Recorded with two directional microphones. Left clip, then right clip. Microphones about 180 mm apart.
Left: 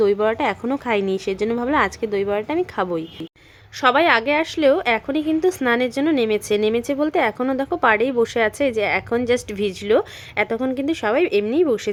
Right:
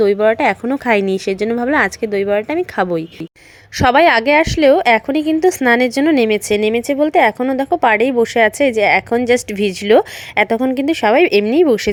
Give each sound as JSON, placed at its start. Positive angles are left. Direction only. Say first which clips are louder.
{"t": 0.0, "sound": "a woman's voice", "louder": "right 6 dB", "side_deg": -20}